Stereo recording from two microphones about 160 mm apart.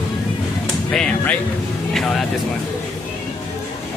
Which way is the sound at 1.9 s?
Centre (ahead or behind).